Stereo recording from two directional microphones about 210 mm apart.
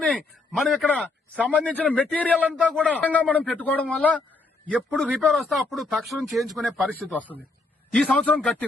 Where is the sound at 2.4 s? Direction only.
5° right (ahead or behind).